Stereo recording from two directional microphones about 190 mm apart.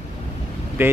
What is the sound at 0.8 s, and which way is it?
Speech, 10° right (ahead or behind).